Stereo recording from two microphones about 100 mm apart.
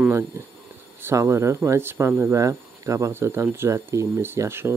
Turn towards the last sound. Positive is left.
turn(degrees=-25)  # may be behind; listen again after turning